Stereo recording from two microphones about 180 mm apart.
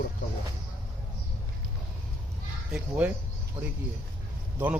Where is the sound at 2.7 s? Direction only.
5° right (ahead or behind).